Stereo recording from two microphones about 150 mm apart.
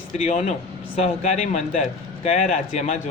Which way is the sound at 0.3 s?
50° left (ahead or behind).